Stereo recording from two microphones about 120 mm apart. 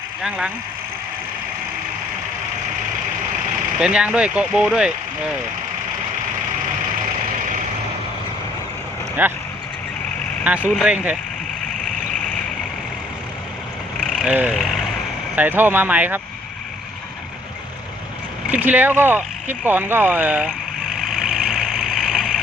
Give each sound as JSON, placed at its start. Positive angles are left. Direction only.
{"t": 0.2, "sound": "speech", "side_deg": -10}
{"t": 3.8, "sound": "speech", "side_deg": -10}
{"t": 9.2, "sound": "speech", "side_deg": -15}
{"t": 10.4, "sound": "speech", "side_deg": -10}
{"t": 14.1, "sound": "vehicle", "side_deg": -5}
{"t": 15.4, "sound": "speech", "side_deg": -15}
{"t": 18.5, "sound": "speech", "side_deg": -15}
{"t": 21.1, "sound": "vehicle", "side_deg": 0}